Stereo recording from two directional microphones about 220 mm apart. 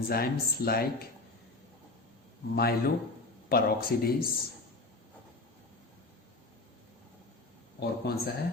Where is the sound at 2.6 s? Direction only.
45° left (ahead or behind).